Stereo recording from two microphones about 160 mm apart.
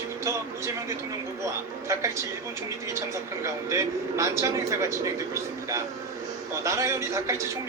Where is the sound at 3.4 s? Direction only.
20° right (ahead or behind).